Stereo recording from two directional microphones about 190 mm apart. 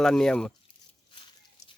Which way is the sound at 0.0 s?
5° left (ahead or behind).